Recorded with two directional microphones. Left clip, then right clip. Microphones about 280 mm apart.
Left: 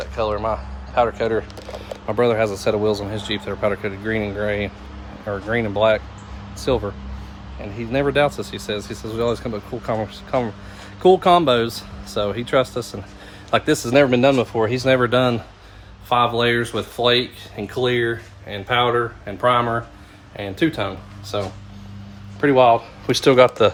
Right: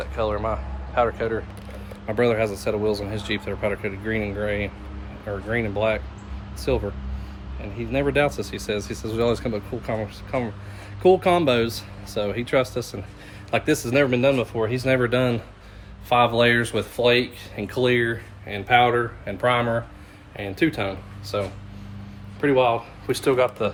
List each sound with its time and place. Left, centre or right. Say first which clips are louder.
0.0 s speech: left 3 dB; centre; by 23.7 s left